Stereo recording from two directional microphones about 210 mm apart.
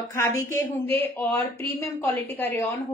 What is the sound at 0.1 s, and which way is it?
A woman's voice, 15° left (ahead or behind).